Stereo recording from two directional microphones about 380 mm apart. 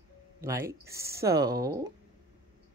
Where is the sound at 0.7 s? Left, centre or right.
Centre.